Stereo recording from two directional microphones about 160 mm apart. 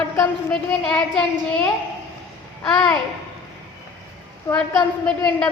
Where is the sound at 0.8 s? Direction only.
5° left (ahead or behind).